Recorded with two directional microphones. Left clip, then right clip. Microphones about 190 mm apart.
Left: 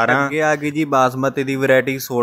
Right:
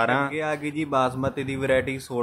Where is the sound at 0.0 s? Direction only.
25° left (ahead or behind).